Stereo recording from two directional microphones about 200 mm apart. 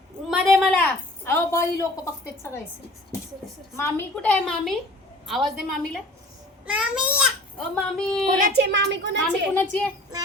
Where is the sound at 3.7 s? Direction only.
10° left (ahead or behind).